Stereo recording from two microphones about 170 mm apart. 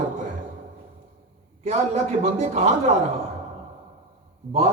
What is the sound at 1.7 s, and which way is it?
A man's voice, 40° right (ahead or behind).